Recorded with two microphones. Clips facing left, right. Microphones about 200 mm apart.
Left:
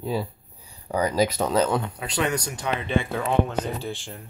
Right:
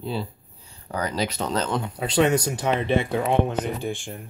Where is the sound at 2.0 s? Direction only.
25° right (ahead or behind).